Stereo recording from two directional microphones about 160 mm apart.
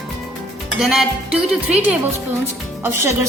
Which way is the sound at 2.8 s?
15° right (ahead or behind).